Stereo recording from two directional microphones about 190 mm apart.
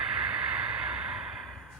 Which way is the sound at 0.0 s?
5° right (ahead or behind).